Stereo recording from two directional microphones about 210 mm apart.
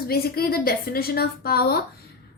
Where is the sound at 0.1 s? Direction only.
45° left (ahead or behind).